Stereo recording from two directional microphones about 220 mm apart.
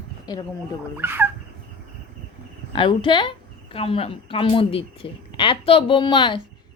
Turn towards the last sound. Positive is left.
turn(degrees=20)  # may be behind; listen again after turning